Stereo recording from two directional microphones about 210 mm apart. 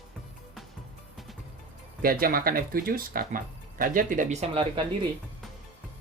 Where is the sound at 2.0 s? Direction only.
45° right (ahead or behind).